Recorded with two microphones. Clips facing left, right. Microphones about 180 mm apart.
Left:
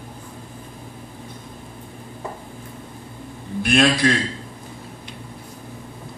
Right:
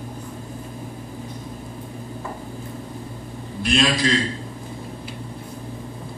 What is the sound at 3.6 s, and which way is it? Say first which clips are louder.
Speech: left 3 dB; 60° left (ahead or behind).